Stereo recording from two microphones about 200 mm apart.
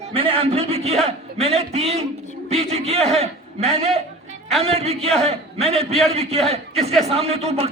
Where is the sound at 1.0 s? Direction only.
30° right (ahead or behind).